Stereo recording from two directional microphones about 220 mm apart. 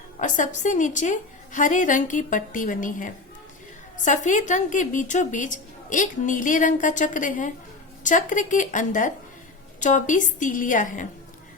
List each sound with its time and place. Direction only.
0.2 s a woman's voice: 35° left (ahead or behind)